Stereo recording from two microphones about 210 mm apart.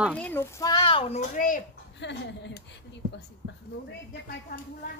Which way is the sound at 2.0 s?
55° left (ahead or behind).